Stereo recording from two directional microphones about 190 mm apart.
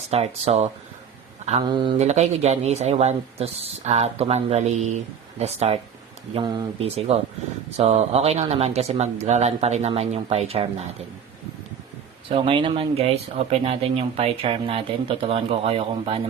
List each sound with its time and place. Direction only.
0.1 s speech: 35° right (ahead or behind)
2.0 s speech: 35° right (ahead or behind)
12.3 s speech: 25° right (ahead or behind)